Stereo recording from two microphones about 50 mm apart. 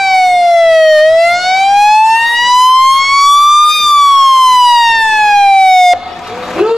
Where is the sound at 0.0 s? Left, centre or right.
Centre.